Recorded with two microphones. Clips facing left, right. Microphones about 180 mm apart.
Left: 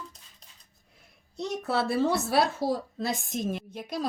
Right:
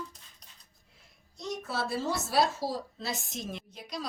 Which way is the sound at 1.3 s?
65° left (ahead or behind).